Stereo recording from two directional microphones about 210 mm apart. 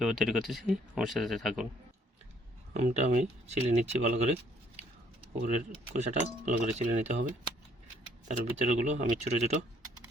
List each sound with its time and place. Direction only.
0.0 s speech: centre (ahead or behind)
2.7 s speech: 30° right (ahead or behind)
5.9 s speech: 35° right (ahead or behind)
8.3 s speech: 35° right (ahead or behind)